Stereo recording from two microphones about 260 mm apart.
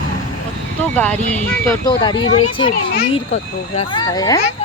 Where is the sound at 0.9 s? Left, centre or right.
Centre.